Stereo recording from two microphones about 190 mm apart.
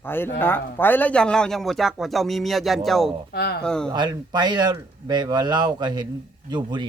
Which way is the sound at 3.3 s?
55° left (ahead or behind).